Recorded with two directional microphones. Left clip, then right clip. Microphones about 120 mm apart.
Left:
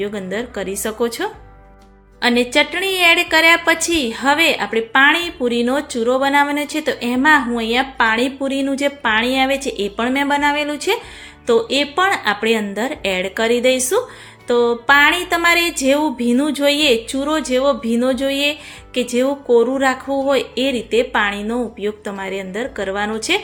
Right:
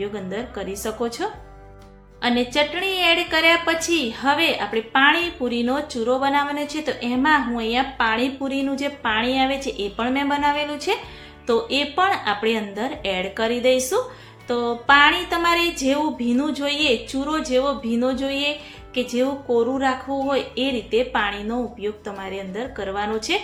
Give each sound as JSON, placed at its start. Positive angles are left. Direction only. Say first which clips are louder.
{"t": 0.0, "sound": "a woman's voice", "louder": "left 5 dB", "side_deg": 45}